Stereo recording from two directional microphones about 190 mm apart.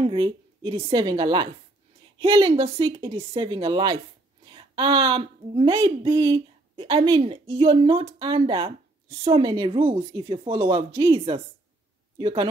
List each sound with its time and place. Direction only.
0.0 s a woman's voice: 25° right (ahead or behind)